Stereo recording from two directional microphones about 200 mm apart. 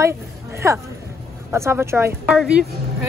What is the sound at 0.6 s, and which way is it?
Speech, 15° right (ahead or behind).